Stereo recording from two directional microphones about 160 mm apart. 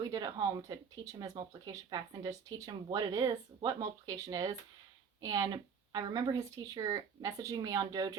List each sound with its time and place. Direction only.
0.0 s speech: 25° right (ahead or behind)